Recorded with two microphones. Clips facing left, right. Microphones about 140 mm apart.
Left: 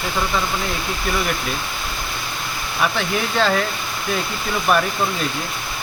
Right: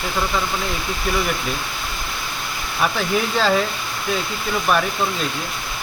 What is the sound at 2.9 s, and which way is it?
Speech, centre (ahead or behind).